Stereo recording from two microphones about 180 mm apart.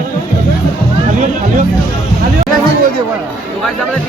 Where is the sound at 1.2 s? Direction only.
45° right (ahead or behind).